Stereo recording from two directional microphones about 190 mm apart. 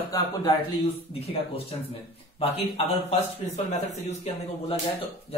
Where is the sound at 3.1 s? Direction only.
35° left (ahead or behind).